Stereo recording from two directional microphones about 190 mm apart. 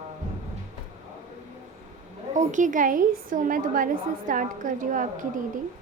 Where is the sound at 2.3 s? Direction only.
40° right (ahead or behind).